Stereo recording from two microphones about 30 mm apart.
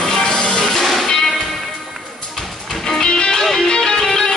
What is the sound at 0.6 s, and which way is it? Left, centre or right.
Music, centre.